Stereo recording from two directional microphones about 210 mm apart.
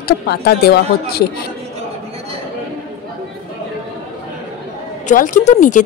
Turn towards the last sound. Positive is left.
turn(degrees=35)  # may be behind; listen again after turning